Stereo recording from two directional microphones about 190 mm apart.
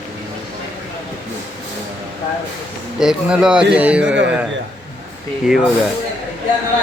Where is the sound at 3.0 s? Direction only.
5° right (ahead or behind).